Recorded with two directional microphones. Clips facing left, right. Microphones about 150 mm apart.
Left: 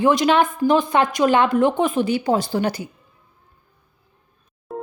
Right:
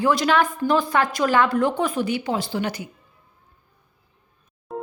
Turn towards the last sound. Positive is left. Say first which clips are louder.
# left 1 dB
turn(degrees=0)  # may be behind; listen again after turning